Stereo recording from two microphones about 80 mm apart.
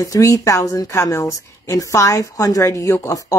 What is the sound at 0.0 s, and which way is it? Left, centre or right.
A woman's voice, left.